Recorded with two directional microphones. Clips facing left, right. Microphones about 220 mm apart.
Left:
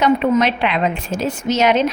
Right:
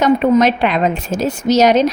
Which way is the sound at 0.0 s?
45° right (ahead or behind).